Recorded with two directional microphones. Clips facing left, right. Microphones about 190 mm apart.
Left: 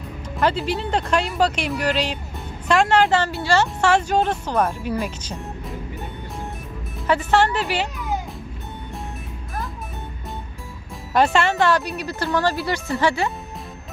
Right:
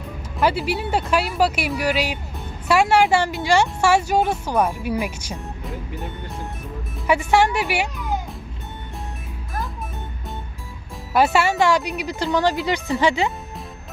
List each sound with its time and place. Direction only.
0.3 s speech: 10° right (ahead or behind)
7.1 s speech: 10° right (ahead or behind)
11.1 s speech: 5° right (ahead or behind)